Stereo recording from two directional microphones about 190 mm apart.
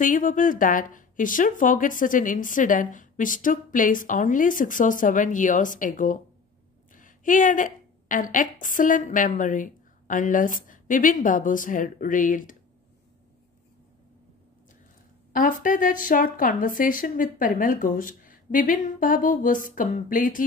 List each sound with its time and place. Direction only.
0.0 s a woman's voice: 45° left (ahead or behind)
15.3 s speech: 45° left (ahead or behind)